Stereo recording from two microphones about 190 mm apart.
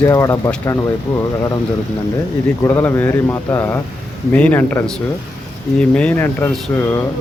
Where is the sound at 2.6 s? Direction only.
15° left (ahead or behind).